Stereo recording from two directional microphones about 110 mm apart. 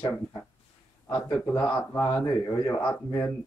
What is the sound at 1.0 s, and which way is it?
Speech, 25° left (ahead or behind).